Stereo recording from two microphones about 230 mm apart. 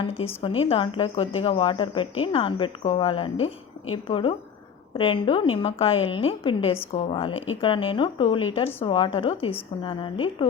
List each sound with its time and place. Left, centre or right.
0.0 s a woman's voice: left